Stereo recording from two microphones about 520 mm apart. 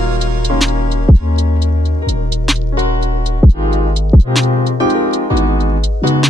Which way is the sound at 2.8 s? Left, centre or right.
Right.